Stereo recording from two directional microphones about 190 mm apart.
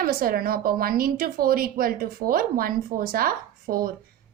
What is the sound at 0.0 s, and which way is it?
A woman's voice, 50° right (ahead or behind).